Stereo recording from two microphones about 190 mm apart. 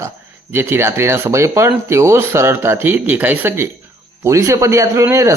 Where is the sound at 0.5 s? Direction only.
10° right (ahead or behind).